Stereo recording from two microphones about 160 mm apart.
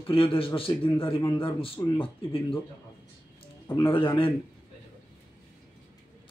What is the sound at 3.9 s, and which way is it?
Speech, 35° left (ahead or behind).